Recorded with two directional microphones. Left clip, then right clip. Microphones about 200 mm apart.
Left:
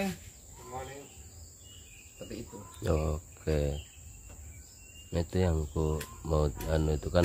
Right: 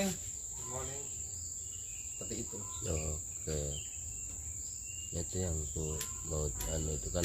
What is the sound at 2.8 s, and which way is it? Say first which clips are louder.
Cricket: left 9 dB; 50° left (ahead or behind).